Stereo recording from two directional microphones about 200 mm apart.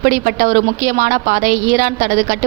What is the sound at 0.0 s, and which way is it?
A woman's voice, 45° right (ahead or behind).